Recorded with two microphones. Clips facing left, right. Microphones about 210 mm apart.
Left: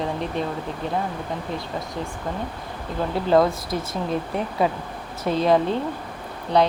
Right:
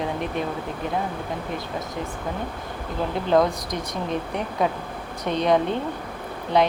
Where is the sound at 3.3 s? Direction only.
5° left (ahead or behind).